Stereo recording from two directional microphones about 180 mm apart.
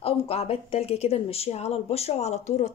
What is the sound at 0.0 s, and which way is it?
Speech, 35° left (ahead or behind).